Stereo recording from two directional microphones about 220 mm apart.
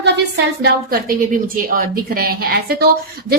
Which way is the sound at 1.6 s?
40° right (ahead or behind).